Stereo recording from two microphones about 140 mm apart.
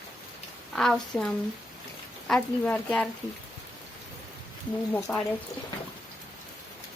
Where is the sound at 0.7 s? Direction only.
5° left (ahead or behind).